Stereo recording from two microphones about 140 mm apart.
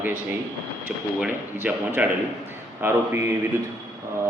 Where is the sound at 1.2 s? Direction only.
10° right (ahead or behind).